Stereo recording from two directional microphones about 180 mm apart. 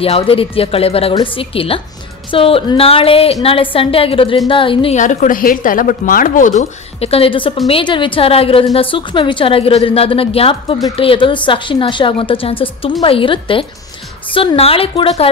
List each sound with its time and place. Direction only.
0.0 s a woman's voice: 30° left (ahead or behind)
4.9 s a woman's voice: 45° left (ahead or behind)